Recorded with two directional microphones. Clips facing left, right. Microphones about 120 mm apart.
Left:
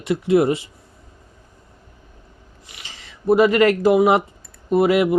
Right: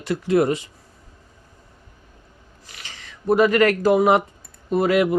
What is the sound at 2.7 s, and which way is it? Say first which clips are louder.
Speech: right 1 dB; 25° left (ahead or behind).